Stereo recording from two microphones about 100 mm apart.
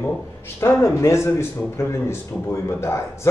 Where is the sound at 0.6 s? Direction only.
25° left (ahead or behind).